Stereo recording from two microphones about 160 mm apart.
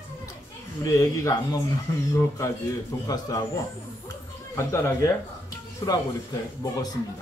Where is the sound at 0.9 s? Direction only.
20° left (ahead or behind).